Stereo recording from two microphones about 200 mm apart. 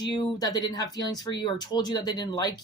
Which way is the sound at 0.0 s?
20° left (ahead or behind).